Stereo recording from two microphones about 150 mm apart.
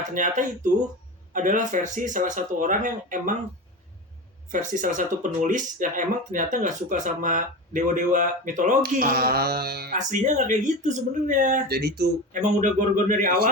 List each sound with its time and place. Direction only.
0.1 s speech: 60° right (ahead or behind)
4.5 s speech: 60° right (ahead or behind); by 10.0 s 90° right
10.1 s speech: 55° right (ahead or behind)
11.7 s speech: 90° right
12.4 s speech: 55° right (ahead or behind)